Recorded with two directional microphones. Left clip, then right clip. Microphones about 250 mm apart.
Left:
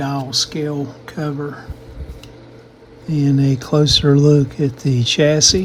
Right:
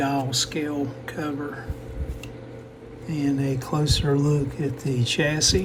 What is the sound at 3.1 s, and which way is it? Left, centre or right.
Speech, left.